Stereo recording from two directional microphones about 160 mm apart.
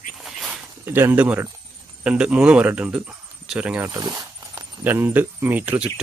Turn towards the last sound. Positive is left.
turn(degrees=-10)  # may be behind; listen again after turning